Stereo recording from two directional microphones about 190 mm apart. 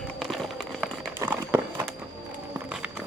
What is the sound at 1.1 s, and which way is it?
Crumpling, 10° right (ahead or behind).